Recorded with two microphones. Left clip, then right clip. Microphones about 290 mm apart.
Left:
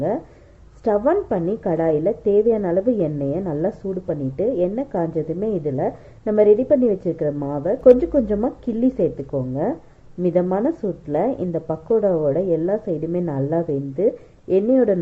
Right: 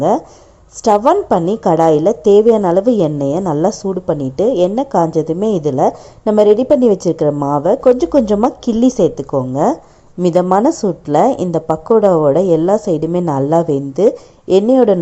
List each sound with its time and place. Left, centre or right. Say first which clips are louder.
0.9 s a woman's voice: right 8 dB; centre